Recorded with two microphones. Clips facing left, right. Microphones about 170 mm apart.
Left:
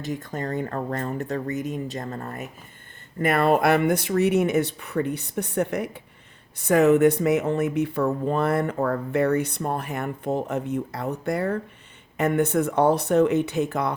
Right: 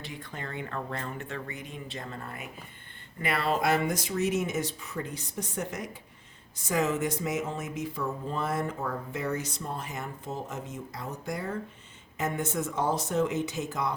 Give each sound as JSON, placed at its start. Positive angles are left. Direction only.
{"t": 0.0, "sound": "speech", "side_deg": 45}